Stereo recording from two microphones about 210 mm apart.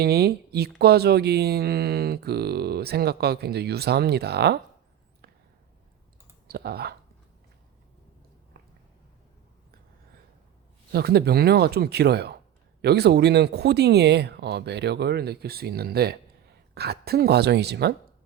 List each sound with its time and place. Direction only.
0.0 s speech: 50° right (ahead or behind)
6.5 s speech: 50° right (ahead or behind)
10.9 s speech: 50° right (ahead or behind)